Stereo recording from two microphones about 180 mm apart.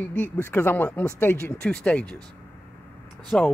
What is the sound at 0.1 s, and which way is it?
A man's voice, 10° left (ahead or behind).